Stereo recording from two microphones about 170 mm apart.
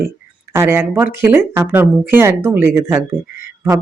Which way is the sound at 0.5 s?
15° right (ahead or behind).